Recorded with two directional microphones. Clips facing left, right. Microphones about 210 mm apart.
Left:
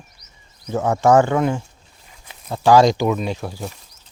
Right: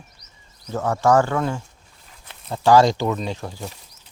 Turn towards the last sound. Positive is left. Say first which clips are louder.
# left 3 dB
turn(degrees=10)  # may be behind; listen again after turning